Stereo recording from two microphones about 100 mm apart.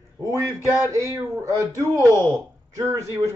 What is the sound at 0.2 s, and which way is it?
A man's voice, 35° right (ahead or behind).